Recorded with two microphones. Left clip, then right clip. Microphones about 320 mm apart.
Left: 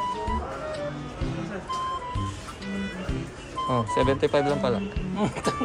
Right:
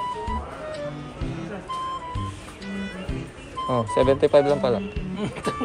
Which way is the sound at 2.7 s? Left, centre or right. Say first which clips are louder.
Even; centre.